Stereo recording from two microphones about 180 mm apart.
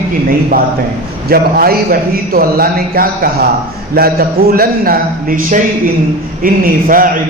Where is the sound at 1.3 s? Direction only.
55° right (ahead or behind).